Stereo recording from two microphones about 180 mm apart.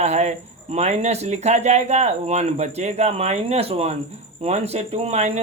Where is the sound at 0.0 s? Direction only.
40° right (ahead or behind).